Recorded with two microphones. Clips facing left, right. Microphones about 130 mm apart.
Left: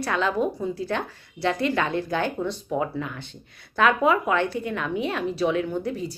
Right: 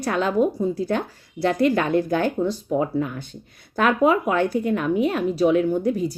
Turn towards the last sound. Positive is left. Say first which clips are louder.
# right 6 dB
turn(degrees=-45)  # may be behind; listen again after turning